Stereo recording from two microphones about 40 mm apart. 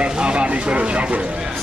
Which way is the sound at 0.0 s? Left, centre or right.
Right.